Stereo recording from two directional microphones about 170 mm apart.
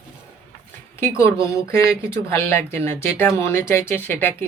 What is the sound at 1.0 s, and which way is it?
Speech, 15° left (ahead or behind).